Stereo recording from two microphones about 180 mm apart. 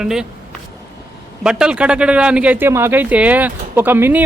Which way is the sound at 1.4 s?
5° right (ahead or behind).